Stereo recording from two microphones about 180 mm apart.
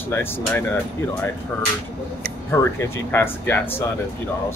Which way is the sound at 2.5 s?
15° left (ahead or behind).